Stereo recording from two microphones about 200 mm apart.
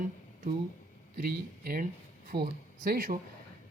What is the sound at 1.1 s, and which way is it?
Speech, 45° right (ahead or behind).